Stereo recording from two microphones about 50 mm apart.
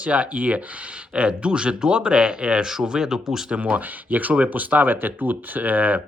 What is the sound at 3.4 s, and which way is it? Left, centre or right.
Speech, right.